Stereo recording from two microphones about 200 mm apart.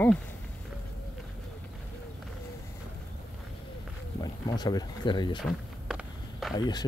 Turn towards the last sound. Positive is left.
turn(degrees=20)  # may be behind; listen again after turning